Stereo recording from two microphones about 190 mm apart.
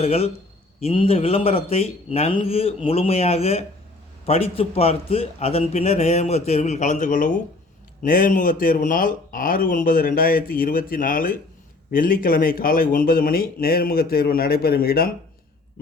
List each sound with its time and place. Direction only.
0.0 s a man's voice: 30° left (ahead or behind); by 15.1 s 50° left (ahead or behind)